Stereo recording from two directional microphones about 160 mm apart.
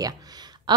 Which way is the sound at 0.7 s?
30° right (ahead or behind).